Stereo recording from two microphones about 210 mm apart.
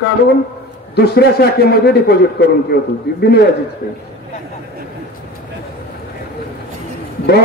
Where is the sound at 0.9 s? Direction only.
50° left (ahead or behind).